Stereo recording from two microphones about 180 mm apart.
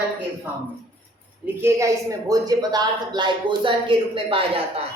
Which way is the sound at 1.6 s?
15° right (ahead or behind).